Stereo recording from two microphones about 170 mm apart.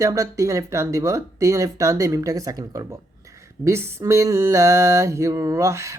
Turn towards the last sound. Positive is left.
turn(degrees=-15)  # may be behind; listen again after turning